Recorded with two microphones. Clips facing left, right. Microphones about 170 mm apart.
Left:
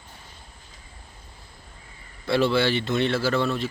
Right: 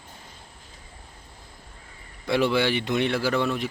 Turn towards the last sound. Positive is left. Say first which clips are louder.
# left 1 dB
turn(degrees=-15)  # may be behind; listen again after turning